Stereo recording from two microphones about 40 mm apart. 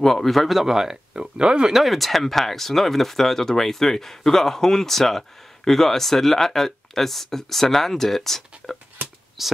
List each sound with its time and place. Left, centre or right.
0.0 s speech: centre
1.1 s speech: right
1.7 s speech: centre
9.4 s speech: centre